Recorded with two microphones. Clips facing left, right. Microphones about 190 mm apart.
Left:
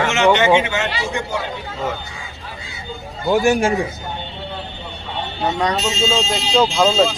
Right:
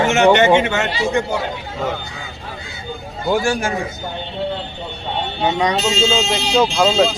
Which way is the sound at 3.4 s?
25° left (ahead or behind).